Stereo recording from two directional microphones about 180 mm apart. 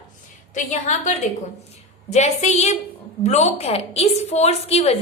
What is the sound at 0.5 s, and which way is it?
A woman's voice, 40° left (ahead or behind).